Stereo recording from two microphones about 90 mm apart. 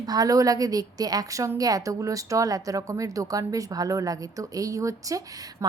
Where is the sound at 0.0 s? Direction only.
45° right (ahead or behind).